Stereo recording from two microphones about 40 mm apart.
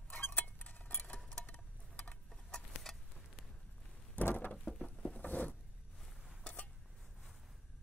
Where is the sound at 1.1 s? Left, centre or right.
Centre.